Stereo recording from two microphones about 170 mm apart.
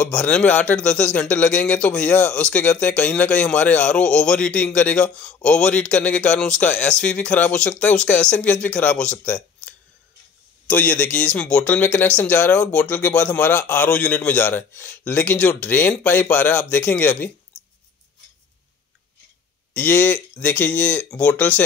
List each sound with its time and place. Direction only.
0.0 s a man's voice: 5° left (ahead or behind)
19.7 s a man's voice: 10° left (ahead or behind)